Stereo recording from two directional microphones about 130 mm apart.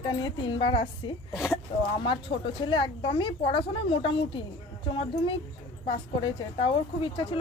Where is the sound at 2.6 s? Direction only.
40° left (ahead or behind).